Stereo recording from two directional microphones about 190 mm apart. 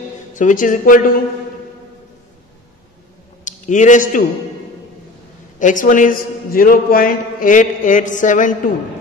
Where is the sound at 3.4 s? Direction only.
40° left (ahead or behind).